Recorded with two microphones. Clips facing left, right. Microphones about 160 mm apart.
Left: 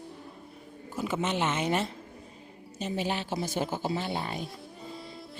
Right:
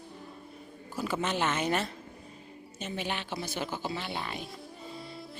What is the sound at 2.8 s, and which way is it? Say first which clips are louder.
Speech: left 4 dB; 35° left (ahead or behind).